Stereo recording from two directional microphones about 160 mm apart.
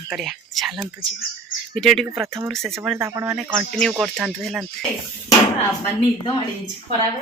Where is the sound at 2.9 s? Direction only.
15° right (ahead or behind); by 4.6 s centre (ahead or behind).